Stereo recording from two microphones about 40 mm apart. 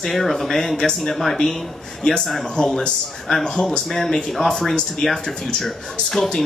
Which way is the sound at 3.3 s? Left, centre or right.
Centre.